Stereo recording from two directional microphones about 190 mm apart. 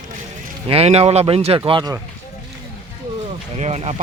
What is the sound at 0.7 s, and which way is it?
Speech, 35° right (ahead or behind).